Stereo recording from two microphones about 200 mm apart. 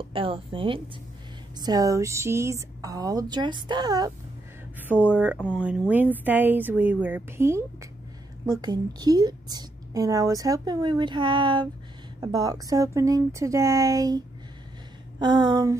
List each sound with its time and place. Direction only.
0.0 s a woman's voice: 25° right (ahead or behind)
5.1 s a woman's voice: 5° right (ahead or behind)